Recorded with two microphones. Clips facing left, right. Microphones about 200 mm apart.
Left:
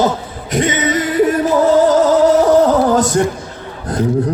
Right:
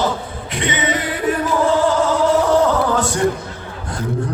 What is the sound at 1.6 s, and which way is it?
Music, 40° left (ahead or behind).